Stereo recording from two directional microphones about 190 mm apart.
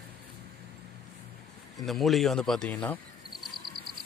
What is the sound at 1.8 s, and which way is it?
Speech, centre (ahead or behind).